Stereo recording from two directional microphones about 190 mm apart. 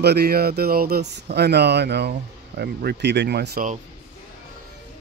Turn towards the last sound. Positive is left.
turn(degrees=-55)  # may be behind; listen again after turning